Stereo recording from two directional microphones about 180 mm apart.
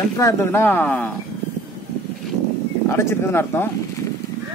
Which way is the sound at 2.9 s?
15° left (ahead or behind).